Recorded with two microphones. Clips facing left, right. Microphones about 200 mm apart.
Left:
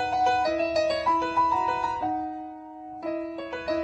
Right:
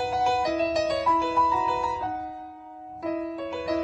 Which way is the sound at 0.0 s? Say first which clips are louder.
Even; centre (ahead or behind).